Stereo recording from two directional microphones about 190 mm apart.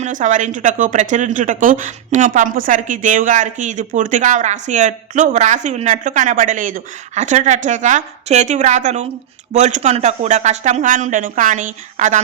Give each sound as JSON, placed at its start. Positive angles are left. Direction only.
{"t": 0.0, "sound": "speech", "side_deg": -40}